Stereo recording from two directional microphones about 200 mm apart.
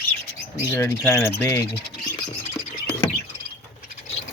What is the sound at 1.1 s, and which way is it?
Speech, 10° left (ahead or behind).